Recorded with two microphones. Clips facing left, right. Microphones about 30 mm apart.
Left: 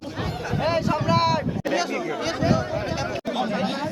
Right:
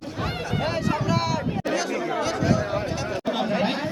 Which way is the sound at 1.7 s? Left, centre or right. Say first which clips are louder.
Left 2 dB; left.